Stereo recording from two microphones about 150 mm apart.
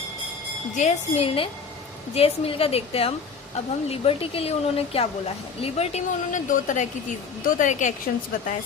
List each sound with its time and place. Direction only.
0.8 s a woman's voice: 45° left (ahead or behind)